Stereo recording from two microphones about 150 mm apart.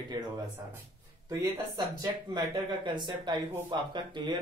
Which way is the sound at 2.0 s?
30° right (ahead or behind).